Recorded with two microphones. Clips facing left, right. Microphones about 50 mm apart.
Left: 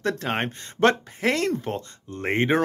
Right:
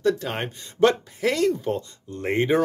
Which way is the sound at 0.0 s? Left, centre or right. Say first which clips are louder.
Right 2 dB; left.